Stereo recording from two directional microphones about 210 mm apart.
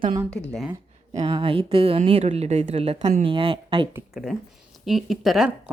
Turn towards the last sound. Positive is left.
turn(degrees=0)  # may be behind; listen again after turning